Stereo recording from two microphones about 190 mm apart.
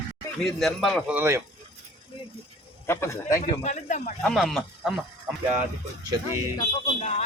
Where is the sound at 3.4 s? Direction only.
40° left (ahead or behind).